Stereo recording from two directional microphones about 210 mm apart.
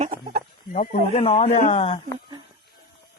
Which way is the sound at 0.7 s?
35° left (ahead or behind).